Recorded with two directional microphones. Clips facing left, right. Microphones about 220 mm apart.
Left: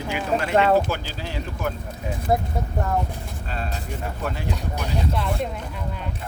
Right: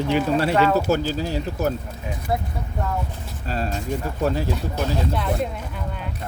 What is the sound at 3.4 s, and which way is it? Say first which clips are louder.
Speech: right 6 dB; 35° right (ahead or behind).